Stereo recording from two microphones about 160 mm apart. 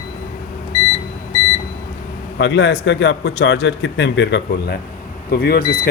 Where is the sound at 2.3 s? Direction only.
90° left.